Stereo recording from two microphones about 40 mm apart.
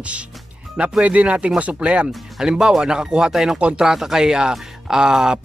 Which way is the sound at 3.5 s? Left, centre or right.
Right.